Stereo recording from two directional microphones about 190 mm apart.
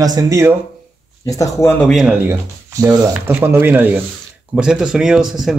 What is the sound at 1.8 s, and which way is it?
Speech, centre (ahead or behind).